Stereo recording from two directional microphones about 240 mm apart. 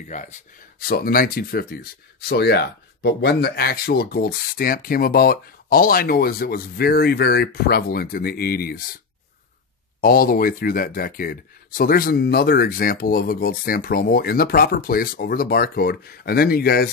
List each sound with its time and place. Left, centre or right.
0.1 s speech: left
9.9 s speech: left